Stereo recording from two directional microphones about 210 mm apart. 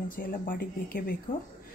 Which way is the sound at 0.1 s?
40° left (ahead or behind).